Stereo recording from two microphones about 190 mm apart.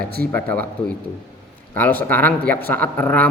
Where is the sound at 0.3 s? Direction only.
10° left (ahead or behind).